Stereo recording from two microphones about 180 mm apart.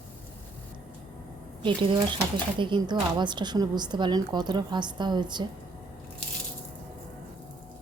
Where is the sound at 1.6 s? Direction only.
25° right (ahead or behind).